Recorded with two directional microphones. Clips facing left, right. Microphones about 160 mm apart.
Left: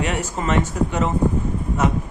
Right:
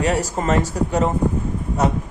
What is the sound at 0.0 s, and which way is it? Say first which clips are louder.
Speech: right 3 dB; 35° right (ahead or behind).